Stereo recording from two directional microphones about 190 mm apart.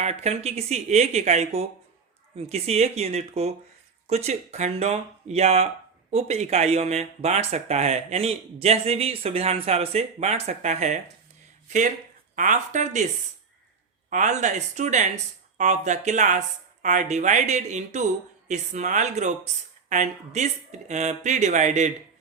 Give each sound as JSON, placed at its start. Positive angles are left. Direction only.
{"t": 0.0, "sound": "speech", "side_deg": -35}
{"t": 12.4, "sound": "speech", "side_deg": -40}
{"t": 14.1, "sound": "speech", "side_deg": -40}